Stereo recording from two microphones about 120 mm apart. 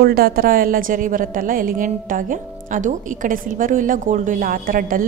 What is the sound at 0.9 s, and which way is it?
A woman's voice, 90° right.